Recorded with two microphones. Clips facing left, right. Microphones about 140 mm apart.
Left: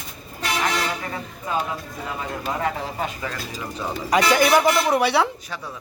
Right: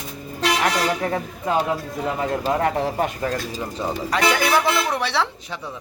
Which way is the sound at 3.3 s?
35° right (ahead or behind).